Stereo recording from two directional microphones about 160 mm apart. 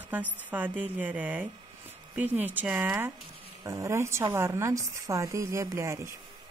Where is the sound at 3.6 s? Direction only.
20° right (ahead or behind).